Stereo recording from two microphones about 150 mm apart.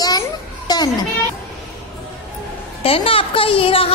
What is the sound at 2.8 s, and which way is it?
Speech, 40° left (ahead or behind).